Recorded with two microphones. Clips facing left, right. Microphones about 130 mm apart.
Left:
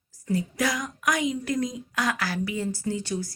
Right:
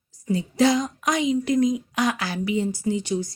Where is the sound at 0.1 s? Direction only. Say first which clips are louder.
Right 2 dB; 20° right (ahead or behind).